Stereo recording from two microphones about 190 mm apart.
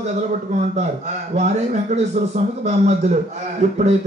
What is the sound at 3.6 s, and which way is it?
Speech, 40° right (ahead or behind).